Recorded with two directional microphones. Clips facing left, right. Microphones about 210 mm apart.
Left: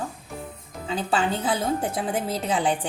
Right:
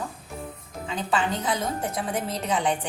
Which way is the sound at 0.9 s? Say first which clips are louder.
Left 2 dB; 30° left (ahead or behind).